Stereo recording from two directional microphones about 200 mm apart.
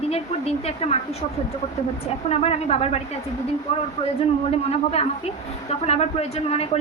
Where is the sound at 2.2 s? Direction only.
30° left (ahead or behind).